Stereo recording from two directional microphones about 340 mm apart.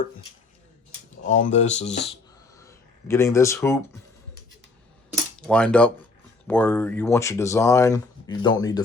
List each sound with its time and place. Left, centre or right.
1.3 s speech: left
2.6 s speech: centre
5.4 s speech: centre